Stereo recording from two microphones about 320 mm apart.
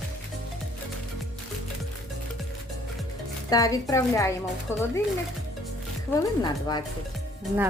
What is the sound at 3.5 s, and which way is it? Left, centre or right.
A woman's voice, centre.